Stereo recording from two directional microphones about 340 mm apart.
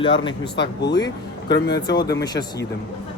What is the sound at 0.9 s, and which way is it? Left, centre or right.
Speech, centre.